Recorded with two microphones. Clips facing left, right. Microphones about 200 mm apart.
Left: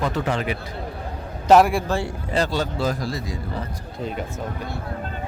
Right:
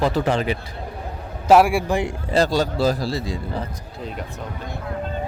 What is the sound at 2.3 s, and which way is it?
A man's voice, 35° right (ahead or behind).